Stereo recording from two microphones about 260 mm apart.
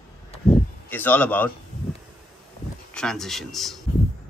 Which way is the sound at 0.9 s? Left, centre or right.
Centre.